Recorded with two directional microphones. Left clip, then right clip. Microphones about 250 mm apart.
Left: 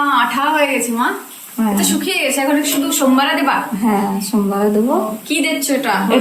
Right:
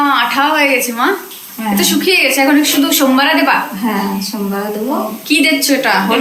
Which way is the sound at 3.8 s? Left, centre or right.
Left.